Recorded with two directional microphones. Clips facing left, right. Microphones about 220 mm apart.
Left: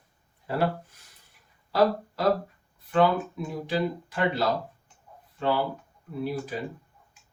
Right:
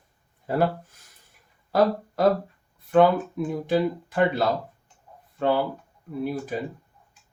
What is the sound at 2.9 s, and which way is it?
Speech, 50° right (ahead or behind).